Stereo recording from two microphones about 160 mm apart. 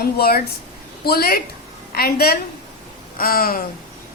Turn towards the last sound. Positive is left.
turn(degrees=65)  # may be behind; listen again after turning